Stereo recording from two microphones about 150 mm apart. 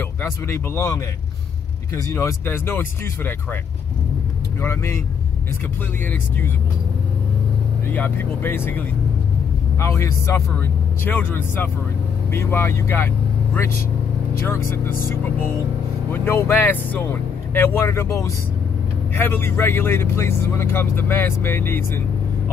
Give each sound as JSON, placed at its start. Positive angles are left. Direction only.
{"t": 0.2, "sound": "speech", "side_deg": 20}
{"t": 7.9, "sound": "a man's voice", "side_deg": 15}
{"t": 14.5, "sound": "speech", "side_deg": 15}